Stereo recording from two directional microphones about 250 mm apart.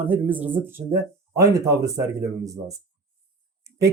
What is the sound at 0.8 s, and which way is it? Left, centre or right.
Speech, right.